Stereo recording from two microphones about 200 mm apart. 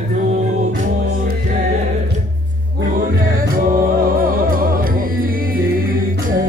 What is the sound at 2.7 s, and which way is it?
Music, 45° right (ahead or behind).